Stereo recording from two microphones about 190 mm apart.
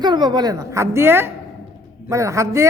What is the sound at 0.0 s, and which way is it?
A man's voice, 25° right (ahead or behind).